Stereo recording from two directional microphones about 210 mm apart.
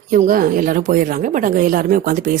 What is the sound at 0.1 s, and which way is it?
Speech, 40° right (ahead or behind).